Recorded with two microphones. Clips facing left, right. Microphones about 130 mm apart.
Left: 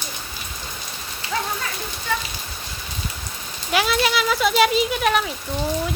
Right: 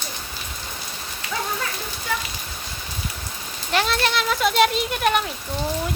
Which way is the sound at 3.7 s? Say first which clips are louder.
Left 2 dB; 5° left (ahead or behind).